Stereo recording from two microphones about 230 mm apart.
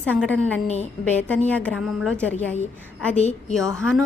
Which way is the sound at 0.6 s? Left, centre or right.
Left.